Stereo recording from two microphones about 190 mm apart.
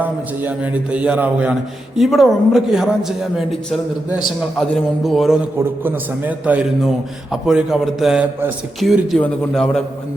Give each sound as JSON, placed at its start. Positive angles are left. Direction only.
{"t": 0.0, "sound": "a man's voice", "side_deg": -10}